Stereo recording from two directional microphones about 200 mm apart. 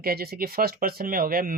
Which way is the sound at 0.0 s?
50° right (ahead or behind).